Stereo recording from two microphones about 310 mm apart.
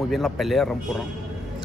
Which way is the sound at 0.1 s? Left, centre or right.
Centre.